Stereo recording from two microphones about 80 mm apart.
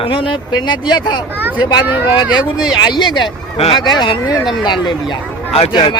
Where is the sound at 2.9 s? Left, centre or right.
Left.